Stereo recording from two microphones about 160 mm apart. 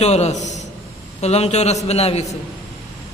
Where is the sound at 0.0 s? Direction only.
45° left (ahead or behind).